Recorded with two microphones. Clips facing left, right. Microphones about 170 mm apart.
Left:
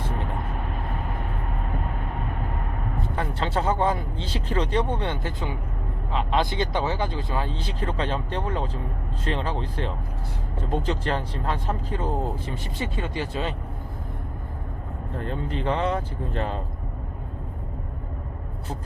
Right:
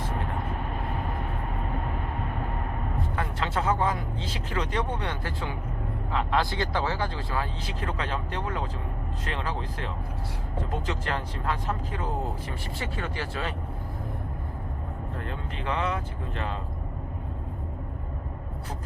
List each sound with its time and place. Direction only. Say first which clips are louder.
3.2 s speech: left 4 dB; 30° left (ahead or behind)
15.2 s speech: left 10 dB; 35° left (ahead or behind)